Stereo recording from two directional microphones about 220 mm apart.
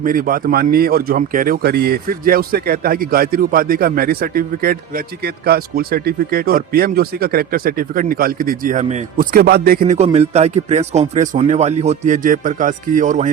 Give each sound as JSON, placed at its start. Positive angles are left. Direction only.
{"t": 0.0, "sound": "speech", "side_deg": -40}